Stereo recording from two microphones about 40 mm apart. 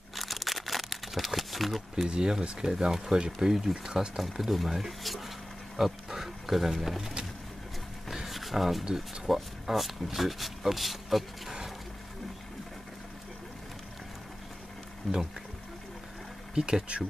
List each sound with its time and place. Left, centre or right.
0.1 s insect: centre
2.0 s speech: centre
4.2 s speech: centre
8.1 s a sound: centre
8.9 s speech: centre
15.0 s speech: centre
16.5 s speech: centre